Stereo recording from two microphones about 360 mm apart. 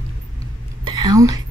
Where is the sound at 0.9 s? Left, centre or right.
Centre.